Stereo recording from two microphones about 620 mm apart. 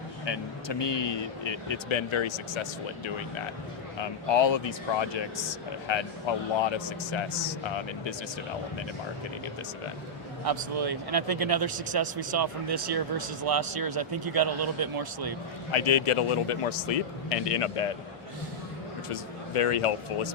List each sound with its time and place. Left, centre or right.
0.3 s speech: left
4.4 s speech: left
10.4 s speech: right
15.7 s a man's voice: left
19.0 s speech: left